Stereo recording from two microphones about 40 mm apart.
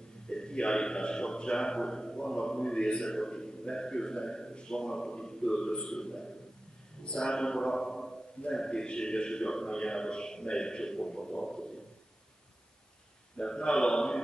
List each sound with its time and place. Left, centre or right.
0.3 s speech: centre
13.4 s speech: left